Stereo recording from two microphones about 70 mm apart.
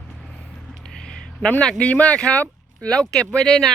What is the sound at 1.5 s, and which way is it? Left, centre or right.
A man's voice, left.